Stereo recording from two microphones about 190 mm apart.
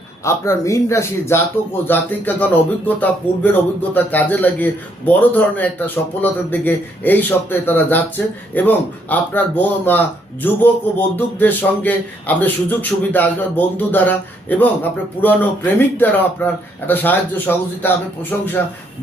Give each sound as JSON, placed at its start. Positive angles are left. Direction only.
{"t": 0.3, "sound": "a man's voice", "side_deg": 15}